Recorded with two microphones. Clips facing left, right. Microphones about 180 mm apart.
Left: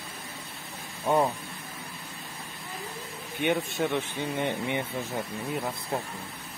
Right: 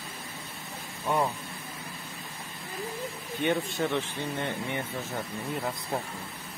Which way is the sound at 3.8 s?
15° left (ahead or behind).